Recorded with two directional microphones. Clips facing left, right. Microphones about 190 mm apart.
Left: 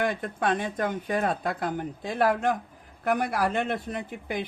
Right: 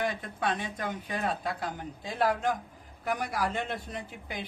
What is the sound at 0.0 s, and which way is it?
Speech, 50° left (ahead or behind).